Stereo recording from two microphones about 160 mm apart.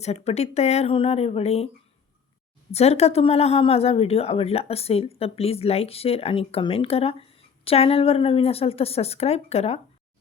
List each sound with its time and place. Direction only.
0.0 s speech: 40° left (ahead or behind)
2.7 s speech: 40° left (ahead or behind)